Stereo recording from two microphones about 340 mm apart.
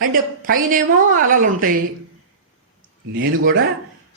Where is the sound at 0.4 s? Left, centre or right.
Right.